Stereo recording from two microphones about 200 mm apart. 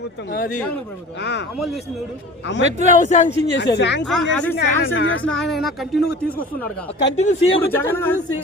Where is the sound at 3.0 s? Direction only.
35° left (ahead or behind).